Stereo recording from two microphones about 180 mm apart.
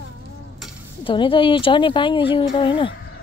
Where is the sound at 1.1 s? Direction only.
30° left (ahead or behind).